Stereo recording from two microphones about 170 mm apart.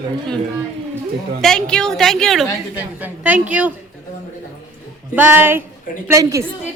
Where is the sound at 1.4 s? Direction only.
5° left (ahead or behind).